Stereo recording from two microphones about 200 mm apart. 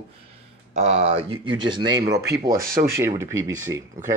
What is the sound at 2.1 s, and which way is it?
Speech, 55° right (ahead or behind).